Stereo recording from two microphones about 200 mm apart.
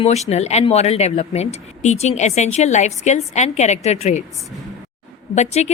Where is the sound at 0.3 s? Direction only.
35° left (ahead or behind).